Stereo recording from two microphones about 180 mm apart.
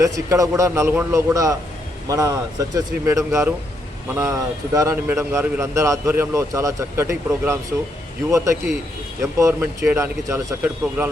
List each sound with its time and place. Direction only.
0.0 s speech: 20° right (ahead or behind)
9.2 s speech: 15° right (ahead or behind)